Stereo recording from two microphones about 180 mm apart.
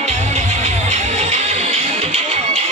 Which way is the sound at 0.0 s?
40° right (ahead or behind).